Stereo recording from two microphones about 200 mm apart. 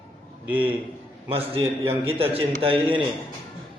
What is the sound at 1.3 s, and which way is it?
A man's voice, 30° right (ahead or behind).